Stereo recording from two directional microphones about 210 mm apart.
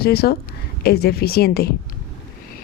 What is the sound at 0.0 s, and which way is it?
Speech, 45° left (ahead or behind).